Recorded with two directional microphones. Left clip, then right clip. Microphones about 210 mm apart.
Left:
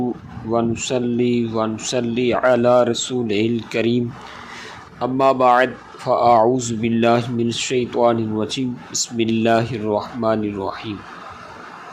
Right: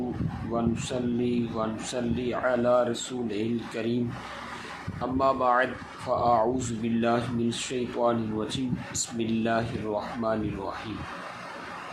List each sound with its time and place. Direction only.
0.5 s speech: 30° left (ahead or behind)